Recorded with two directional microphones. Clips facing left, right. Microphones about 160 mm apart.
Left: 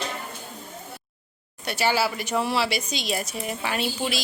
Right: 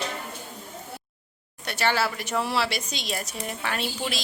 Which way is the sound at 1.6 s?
5° left (ahead or behind).